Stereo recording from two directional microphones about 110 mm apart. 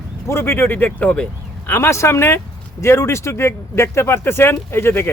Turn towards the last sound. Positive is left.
turn(degrees=20)  # may be behind; listen again after turning